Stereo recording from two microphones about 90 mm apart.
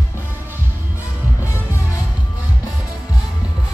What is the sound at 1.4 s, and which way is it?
Music, 30° left (ahead or behind).